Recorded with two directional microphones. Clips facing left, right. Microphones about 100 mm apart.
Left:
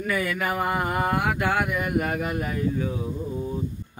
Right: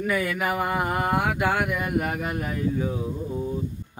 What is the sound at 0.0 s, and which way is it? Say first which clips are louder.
Speech: right 1 dB; 15° right (ahead or behind).